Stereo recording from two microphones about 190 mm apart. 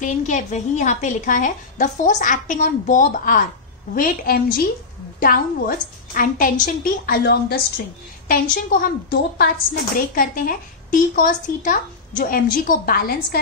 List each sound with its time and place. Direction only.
0.0 s a woman's voice: 40° left (ahead or behind)